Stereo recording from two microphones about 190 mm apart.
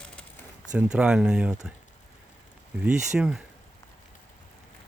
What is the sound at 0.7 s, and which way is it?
Speech, 5° right (ahead or behind).